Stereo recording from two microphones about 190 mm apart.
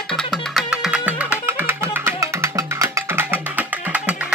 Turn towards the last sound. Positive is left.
turn(degrees=-10)  # may be behind; listen again after turning